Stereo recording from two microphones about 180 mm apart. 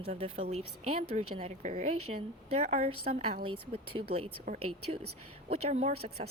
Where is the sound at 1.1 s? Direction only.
40° right (ahead or behind).